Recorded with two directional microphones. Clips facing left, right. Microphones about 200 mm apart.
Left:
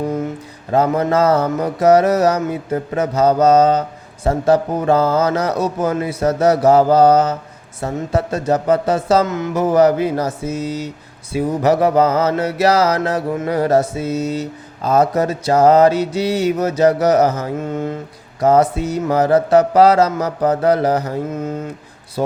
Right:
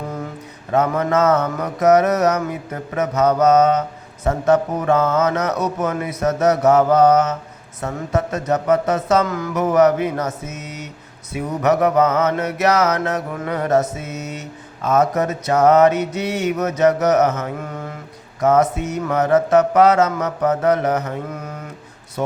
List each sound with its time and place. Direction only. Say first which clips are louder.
0.7 s speech: left 2 dB; 30° left (ahead or behind)